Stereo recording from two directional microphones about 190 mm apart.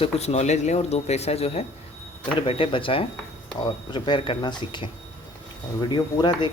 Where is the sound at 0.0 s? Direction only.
35° left (ahead or behind).